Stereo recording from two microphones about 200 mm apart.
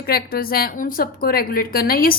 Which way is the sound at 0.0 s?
50° left (ahead or behind).